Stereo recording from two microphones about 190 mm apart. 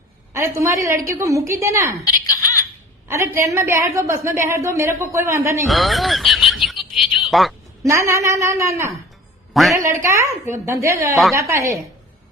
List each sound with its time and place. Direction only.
0.3 s a woman's voice: 15° right (ahead or behind)
2.2 s a sound: 20° left (ahead or behind)
3.1 s a woman's voice: 15° right (ahead or behind)
5.6 s speech: centre (ahead or behind)
6.5 s a sound: centre (ahead or behind)
7.9 s a woman's voice: 15° right (ahead or behind)
9.5 s a man's voice: centre (ahead or behind)
9.7 s a woman's voice: 15° right (ahead or behind)